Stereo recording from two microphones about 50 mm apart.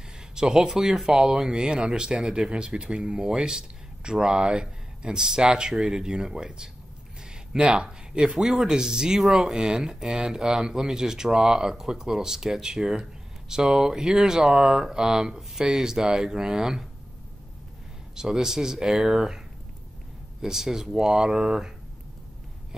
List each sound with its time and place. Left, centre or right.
0.4 s speech: centre
18.1 s speech: centre
20.4 s speech: centre